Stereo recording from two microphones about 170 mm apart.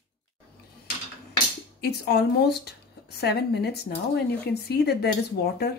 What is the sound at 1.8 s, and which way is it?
Speech, 70° left (ahead or behind).